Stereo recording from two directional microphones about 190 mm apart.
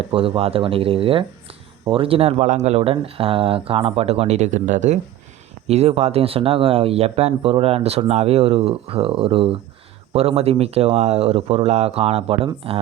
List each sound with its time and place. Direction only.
0.1 s speech: 30° right (ahead or behind)